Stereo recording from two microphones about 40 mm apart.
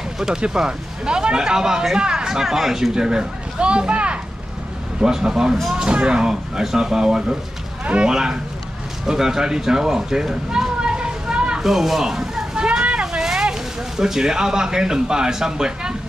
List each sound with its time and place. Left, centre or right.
0.5 s speech: centre
5.0 s speech: centre
5.8 s speech: right
7.8 s speech: right
8.1 s speech: centre
10.8 s a sound: right
11.6 s speech: centre
12.5 s a sound: right